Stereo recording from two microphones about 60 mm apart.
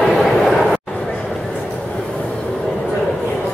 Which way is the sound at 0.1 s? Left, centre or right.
Centre.